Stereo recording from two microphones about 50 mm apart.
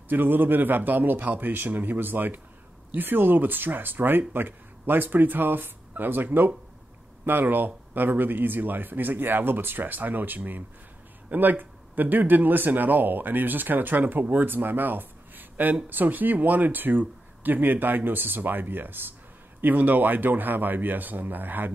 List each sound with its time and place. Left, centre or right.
0.1 s speech: right
7.2 s speech: right